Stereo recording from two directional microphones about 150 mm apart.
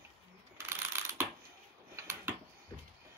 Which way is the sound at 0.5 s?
15° right (ahead or behind).